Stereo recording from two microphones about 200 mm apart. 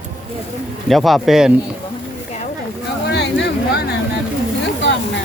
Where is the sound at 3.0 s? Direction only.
60° left (ahead or behind).